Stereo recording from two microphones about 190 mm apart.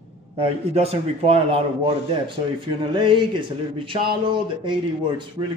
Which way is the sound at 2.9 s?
25° right (ahead or behind).